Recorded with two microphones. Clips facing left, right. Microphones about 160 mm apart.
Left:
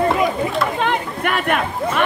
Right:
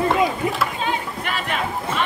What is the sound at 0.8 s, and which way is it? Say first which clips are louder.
Speech: left 5 dB; 60° left (ahead or behind).